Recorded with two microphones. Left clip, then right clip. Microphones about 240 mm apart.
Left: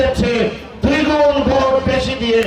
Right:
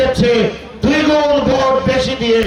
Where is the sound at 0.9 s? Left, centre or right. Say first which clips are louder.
Right 1 dB; right.